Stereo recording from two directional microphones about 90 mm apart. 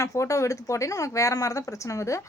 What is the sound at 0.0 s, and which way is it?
A woman's voice, 35° left (ahead or behind).